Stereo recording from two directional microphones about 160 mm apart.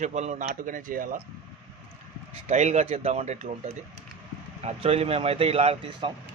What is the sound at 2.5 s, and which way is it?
Speech, 45° right (ahead or behind).